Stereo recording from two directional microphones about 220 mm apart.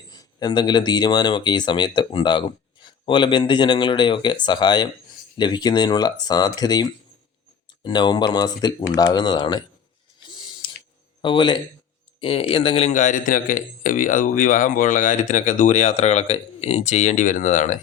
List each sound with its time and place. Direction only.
0.1 s speech: 20° left (ahead or behind)
7.9 s speech: 20° left (ahead or behind)
10.2 s scissors: 20° left (ahead or behind)
11.2 s a man's voice: 20° left (ahead or behind)